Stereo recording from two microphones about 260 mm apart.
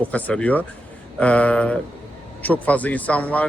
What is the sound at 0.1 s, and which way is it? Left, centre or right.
A man's voice, centre.